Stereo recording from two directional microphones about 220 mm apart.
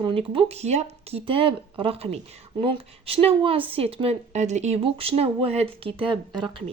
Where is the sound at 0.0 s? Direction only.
25° right (ahead or behind).